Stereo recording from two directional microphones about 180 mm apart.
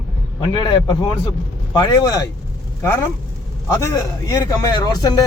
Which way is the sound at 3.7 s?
15° left (ahead or behind).